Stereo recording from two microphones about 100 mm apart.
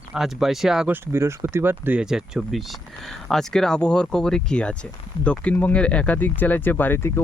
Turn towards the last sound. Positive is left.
turn(degrees=25)  # may be behind; listen again after turning